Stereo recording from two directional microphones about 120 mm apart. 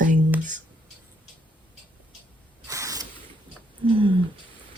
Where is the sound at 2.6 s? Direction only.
25° right (ahead or behind).